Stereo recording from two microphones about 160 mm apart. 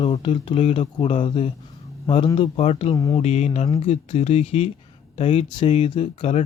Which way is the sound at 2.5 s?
40° left (ahead or behind).